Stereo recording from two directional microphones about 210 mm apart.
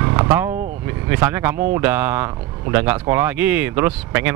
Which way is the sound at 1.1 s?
10° right (ahead or behind).